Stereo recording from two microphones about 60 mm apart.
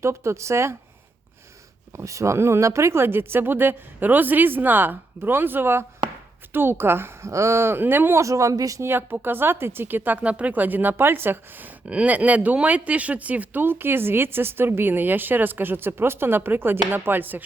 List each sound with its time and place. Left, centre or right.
0.0 s speech: right
2.0 s speech: right
7.3 s speech: right
8.2 s speech: right
8.8 s speech: right
11.9 s speech: right